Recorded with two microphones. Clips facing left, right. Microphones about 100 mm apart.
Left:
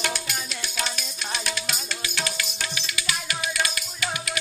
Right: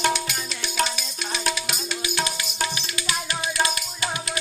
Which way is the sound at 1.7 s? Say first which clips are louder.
Right 4 dB; 15° right (ahead or behind).